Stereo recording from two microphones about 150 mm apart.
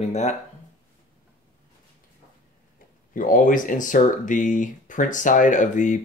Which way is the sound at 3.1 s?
65° left (ahead or behind).